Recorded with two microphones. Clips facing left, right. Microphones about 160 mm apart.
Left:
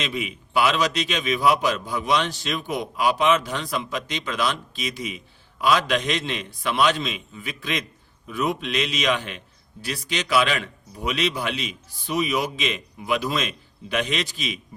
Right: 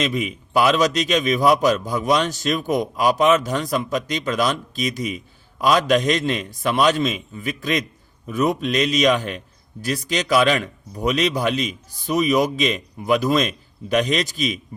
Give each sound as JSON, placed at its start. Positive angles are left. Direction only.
{"t": 0.0, "sound": "a man's voice", "side_deg": -45}